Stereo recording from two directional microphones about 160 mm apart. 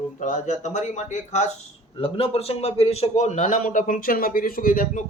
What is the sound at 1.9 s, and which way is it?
A man's voice, 35° left (ahead or behind).